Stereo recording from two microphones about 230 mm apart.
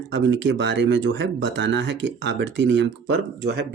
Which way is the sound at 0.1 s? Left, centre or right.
Right.